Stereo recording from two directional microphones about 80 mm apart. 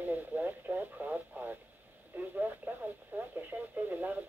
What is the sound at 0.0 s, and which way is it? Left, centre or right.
Radio, right.